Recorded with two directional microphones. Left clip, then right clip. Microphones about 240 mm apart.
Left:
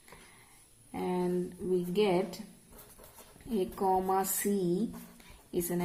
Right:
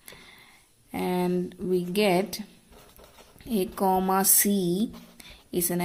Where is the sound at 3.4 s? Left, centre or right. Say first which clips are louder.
Right 5 dB; right.